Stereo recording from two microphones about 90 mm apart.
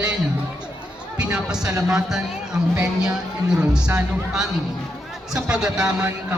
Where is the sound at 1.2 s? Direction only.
10° right (ahead or behind).